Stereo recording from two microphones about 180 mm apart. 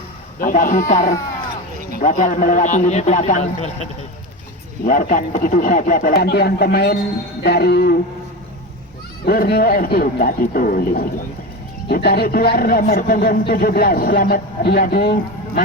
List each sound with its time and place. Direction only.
0.3 s a man's voice: 50° left (ahead or behind)
4.9 s a man's voice: 50° left (ahead or behind)
9.2 s a man's voice: 60° left (ahead or behind)